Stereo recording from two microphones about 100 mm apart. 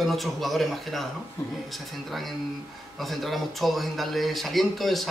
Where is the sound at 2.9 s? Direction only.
Centre (ahead or behind).